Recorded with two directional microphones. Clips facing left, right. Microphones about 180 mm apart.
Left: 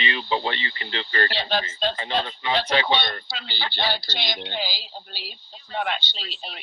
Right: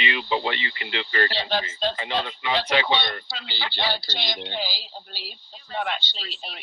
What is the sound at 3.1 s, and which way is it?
Speech, 50° left (ahead or behind).